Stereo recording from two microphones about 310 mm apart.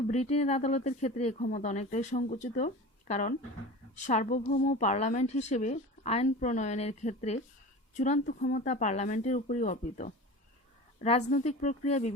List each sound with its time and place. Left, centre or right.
0.1 s a woman's voice: left